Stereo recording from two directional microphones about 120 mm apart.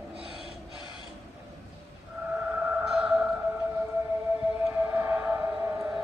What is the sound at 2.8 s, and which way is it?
Music, 5° right (ahead or behind).